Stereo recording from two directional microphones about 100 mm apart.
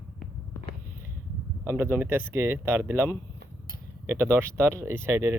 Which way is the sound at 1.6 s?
25° right (ahead or behind).